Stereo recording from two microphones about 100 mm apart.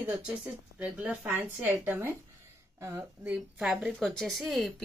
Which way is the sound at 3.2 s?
10° right (ahead or behind).